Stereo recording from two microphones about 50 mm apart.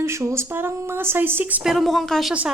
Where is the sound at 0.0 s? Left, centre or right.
Right.